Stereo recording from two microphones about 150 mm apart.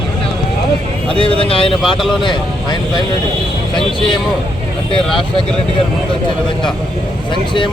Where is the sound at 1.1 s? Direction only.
35° left (ahead or behind).